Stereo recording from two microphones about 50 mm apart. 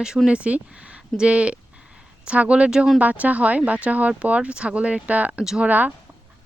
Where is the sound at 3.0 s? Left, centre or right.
Right.